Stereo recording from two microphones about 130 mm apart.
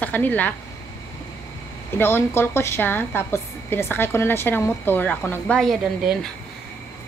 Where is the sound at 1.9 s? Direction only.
15° left (ahead or behind).